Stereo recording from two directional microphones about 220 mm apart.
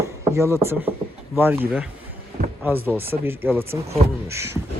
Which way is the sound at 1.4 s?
10° right (ahead or behind).